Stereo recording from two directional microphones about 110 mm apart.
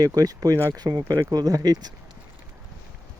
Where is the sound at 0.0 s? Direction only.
35° right (ahead or behind).